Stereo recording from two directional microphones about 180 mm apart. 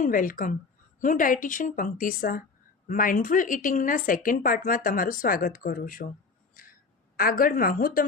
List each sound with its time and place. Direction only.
0.0 s speech: 50° left (ahead or behind)
7.2 s speech: 55° left (ahead or behind)